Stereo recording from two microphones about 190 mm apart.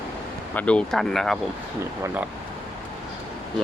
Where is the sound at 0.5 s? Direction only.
5° left (ahead or behind).